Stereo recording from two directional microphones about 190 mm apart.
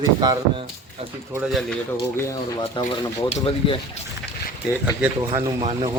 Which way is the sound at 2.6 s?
25° left (ahead or behind).